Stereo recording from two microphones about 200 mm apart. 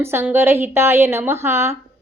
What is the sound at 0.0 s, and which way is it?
A woman's voice, 10° right (ahead or behind).